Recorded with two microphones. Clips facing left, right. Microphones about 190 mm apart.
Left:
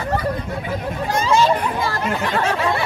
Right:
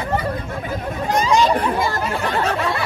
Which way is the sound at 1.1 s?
15° right (ahead or behind).